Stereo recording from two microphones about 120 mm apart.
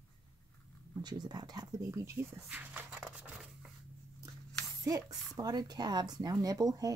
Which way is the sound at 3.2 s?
5° right (ahead or behind).